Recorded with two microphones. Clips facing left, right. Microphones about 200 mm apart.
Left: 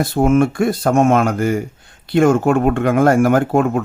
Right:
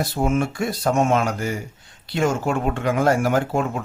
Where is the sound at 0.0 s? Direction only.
55° left (ahead or behind).